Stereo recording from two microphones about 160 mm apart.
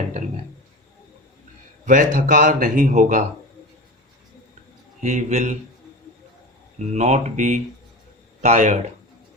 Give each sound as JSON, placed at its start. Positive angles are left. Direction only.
{"t": 1.8, "sound": "a man's voice", "side_deg": -55}
{"t": 5.0, "sound": "a man's voice", "side_deg": -45}
{"t": 6.7, "sound": "a man's voice", "side_deg": -45}